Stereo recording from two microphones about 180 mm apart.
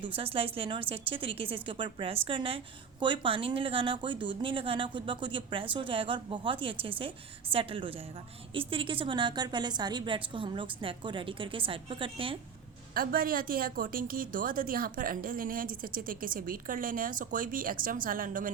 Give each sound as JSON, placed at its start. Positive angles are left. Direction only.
{"t": 0.2, "sound": "a woman's voice", "side_deg": -30}
{"t": 12.9, "sound": "a woman's voice", "side_deg": -55}